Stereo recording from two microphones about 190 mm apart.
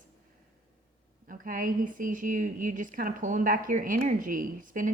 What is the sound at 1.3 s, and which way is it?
A woman's voice, 45° right (ahead or behind).